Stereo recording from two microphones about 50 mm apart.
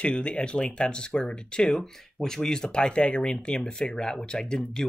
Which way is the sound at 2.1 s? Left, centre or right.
Centre.